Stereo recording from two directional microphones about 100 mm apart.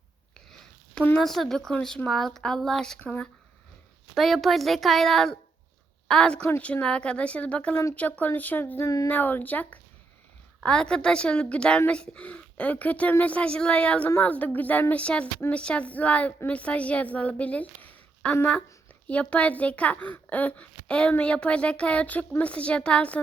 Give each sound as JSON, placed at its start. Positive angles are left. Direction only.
{"t": 1.2, "sound": "a woman's voice", "side_deg": 5}
{"t": 4.1, "sound": "a woman's voice", "side_deg": 0}
{"t": 8.8, "sound": "a sound", "side_deg": 35}
{"t": 9.0, "sound": "a child's voice", "side_deg": 20}